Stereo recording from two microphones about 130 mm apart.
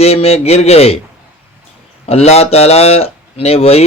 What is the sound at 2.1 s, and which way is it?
Speech, 55° left (ahead or behind).